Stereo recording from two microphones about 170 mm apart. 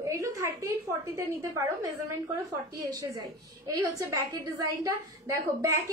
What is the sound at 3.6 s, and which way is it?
A woman's voice, 20° right (ahead or behind).